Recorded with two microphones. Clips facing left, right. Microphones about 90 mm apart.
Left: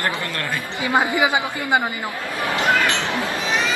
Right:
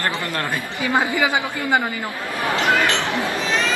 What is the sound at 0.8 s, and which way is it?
Speech, 20° left (ahead or behind).